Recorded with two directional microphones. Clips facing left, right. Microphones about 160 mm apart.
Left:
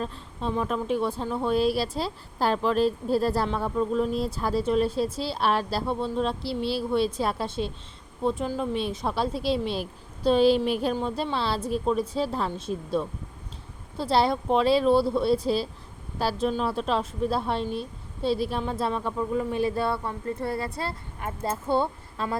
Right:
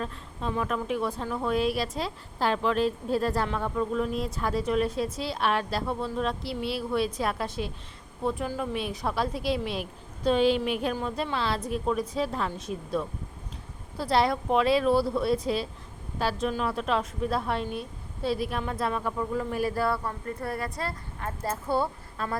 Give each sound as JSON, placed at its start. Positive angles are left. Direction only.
{"t": 0.0, "sound": "a woman's voice", "side_deg": 25}